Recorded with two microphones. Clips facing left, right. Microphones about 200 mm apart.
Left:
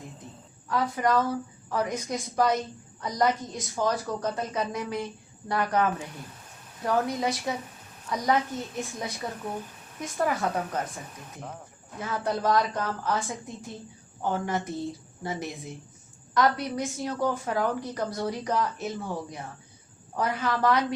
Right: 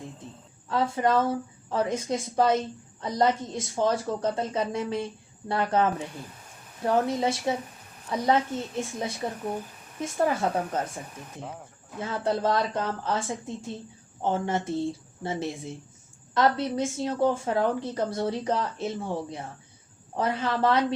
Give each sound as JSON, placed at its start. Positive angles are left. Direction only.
{"t": 0.7, "sound": "a woman's voice", "side_deg": -25}
{"t": 11.9, "sound": "a woman's voice", "side_deg": -25}